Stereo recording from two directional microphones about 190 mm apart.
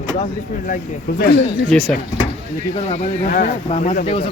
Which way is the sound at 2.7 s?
35° left (ahead or behind).